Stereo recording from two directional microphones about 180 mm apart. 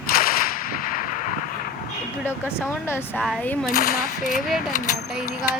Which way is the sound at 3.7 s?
55° left (ahead or behind).